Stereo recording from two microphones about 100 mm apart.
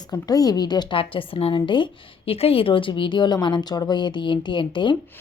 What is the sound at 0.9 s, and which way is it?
A woman's voice, 60° left (ahead or behind).